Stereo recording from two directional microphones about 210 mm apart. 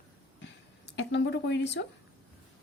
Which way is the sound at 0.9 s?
55° left (ahead or behind).